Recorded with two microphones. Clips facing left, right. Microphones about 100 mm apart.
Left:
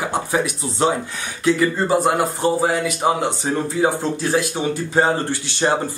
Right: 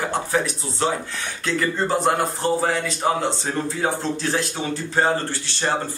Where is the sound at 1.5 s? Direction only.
5° left (ahead or behind).